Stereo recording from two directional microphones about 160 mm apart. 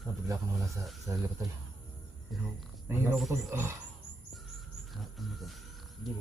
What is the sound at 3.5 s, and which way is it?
Speech, 15° right (ahead or behind).